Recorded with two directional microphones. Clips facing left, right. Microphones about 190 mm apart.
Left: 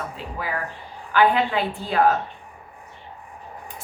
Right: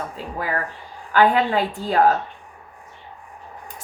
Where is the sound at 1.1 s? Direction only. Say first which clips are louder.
Right 2 dB; 40° right (ahead or behind).